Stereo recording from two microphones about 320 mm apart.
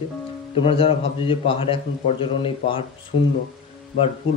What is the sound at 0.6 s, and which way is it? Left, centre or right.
A man's voice, centre.